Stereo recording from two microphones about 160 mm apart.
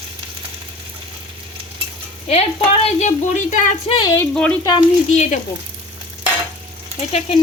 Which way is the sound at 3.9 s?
30° left (ahead or behind).